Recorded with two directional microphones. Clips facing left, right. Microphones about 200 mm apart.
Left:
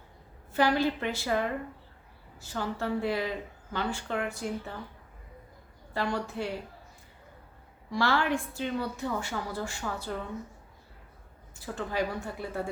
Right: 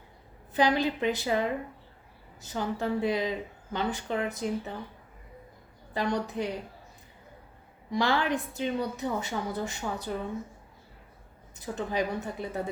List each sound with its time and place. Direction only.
0.5 s a woman's voice: 20° right (ahead or behind)
5.9 s a woman's voice: 20° right (ahead or behind)
7.9 s a woman's voice: 20° right (ahead or behind)
11.5 s a woman's voice: 20° right (ahead or behind)